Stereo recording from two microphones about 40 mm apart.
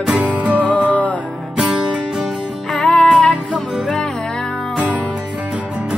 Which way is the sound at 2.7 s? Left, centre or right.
Left.